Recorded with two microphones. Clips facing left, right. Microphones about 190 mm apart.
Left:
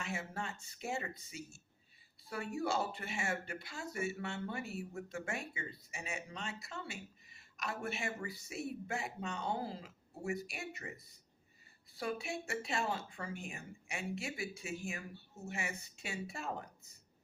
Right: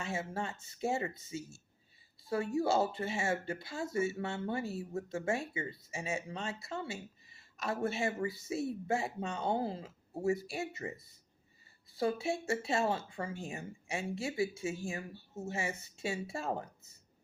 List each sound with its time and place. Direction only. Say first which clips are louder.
0.0 s speech: right 4 dB; 25° right (ahead or behind)